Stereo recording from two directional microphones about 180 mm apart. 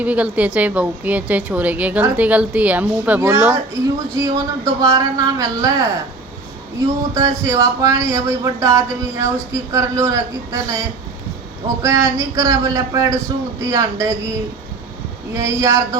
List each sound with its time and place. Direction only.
0.0 s a woman's voice: 10° right (ahead or behind)
7.1 s a woman's voice: 20° right (ahead or behind)
15.3 s a woman's voice: 15° right (ahead or behind)